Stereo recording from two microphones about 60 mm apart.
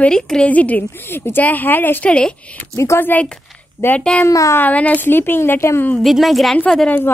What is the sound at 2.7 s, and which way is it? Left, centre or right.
Speech, left.